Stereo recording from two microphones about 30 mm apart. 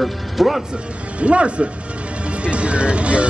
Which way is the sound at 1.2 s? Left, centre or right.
Right.